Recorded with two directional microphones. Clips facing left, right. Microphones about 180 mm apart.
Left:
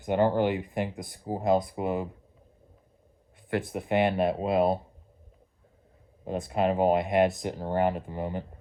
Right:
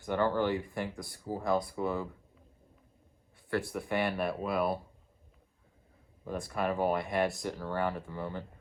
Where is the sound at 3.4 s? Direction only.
20° left (ahead or behind).